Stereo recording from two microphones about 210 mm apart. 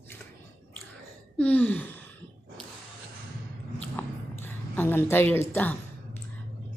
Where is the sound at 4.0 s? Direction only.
10° left (ahead or behind).